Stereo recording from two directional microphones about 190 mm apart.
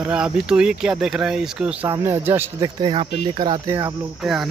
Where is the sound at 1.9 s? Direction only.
15° right (ahead or behind).